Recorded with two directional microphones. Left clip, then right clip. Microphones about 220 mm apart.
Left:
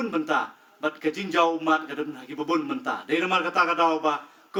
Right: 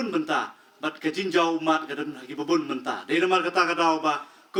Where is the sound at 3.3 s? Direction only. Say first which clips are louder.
Left 2 dB; 50° right (ahead or behind).